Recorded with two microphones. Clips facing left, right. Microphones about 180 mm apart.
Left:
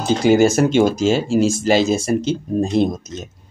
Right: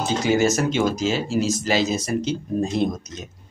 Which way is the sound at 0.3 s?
30° left (ahead or behind).